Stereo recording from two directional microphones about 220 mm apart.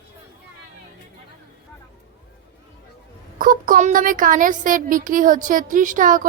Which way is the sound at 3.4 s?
40° right (ahead or behind).